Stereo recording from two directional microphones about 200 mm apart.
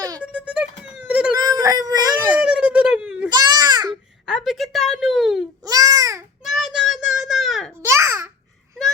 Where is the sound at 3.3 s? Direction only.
20° right (ahead or behind).